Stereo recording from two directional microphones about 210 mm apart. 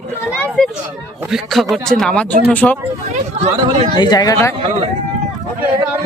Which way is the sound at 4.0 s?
20° left (ahead or behind).